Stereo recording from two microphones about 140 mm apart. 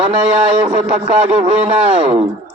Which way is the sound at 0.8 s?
50° right (ahead or behind).